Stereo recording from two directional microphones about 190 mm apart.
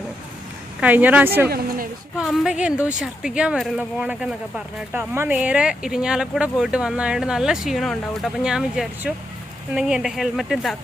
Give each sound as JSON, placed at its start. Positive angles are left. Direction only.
{"t": 0.8, "sound": "a woman's voice", "side_deg": -10}
{"t": 1.5, "sound": "speech", "side_deg": -50}
{"t": 2.1, "sound": "speech", "side_deg": 0}